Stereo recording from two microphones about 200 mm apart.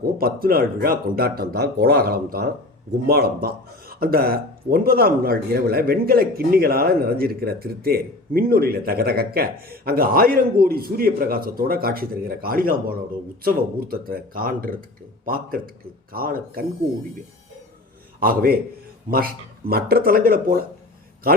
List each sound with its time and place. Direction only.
0.0 s speech: 50° right (ahead or behind)
18.2 s speech: 45° right (ahead or behind)